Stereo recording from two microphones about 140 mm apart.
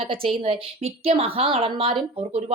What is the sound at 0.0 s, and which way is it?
A woman's voice, 40° right (ahead or behind).